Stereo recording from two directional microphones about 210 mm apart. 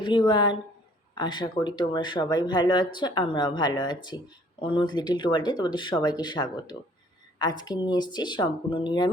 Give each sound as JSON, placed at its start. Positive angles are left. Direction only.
{"t": 0.0, "sound": "a woman's voice", "side_deg": 20}